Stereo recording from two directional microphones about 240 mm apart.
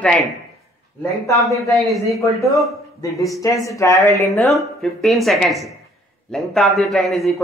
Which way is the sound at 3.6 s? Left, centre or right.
Centre.